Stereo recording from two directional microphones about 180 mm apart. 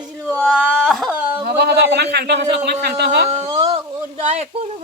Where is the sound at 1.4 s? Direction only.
65° right (ahead or behind).